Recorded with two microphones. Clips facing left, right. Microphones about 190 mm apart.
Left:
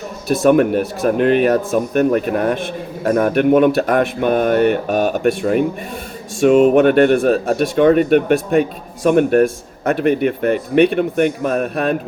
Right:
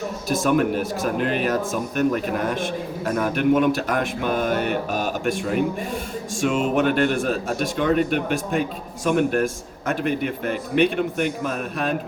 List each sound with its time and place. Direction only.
0.3 s speech: 60° left (ahead or behind)